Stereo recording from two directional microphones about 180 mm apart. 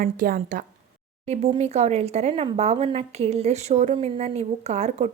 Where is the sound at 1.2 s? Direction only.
35° right (ahead or behind).